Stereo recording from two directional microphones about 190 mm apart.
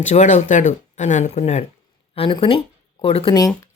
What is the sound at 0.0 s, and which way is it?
Speech, 35° left (ahead or behind).